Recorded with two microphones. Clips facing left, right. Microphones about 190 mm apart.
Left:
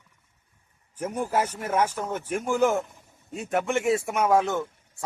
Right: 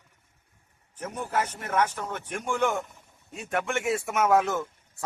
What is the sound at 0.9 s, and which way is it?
A man's voice, 10° left (ahead or behind).